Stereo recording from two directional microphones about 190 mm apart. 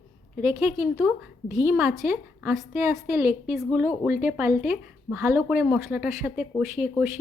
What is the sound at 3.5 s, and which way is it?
A woman's voice, centre (ahead or behind).